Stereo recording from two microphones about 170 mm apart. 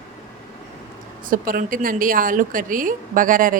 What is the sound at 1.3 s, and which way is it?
A woman's voice, 55° right (ahead or behind).